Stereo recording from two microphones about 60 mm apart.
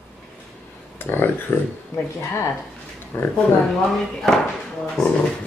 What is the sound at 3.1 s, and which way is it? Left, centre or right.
Speech, left.